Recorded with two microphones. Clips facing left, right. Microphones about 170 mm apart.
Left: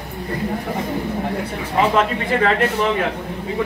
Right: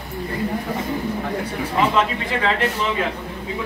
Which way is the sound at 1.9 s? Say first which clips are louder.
Left 3 dB; 50° left (ahead or behind).